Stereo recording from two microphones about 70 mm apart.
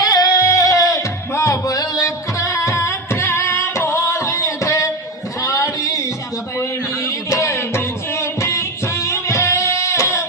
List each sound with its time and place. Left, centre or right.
0.0 s music: left
5.4 s a sound: left
6.6 s music: left